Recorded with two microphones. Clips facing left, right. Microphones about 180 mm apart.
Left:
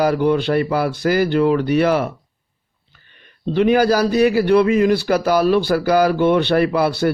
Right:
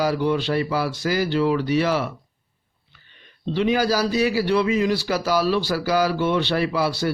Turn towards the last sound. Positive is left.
turn(degrees=55)  # may be behind; listen again after turning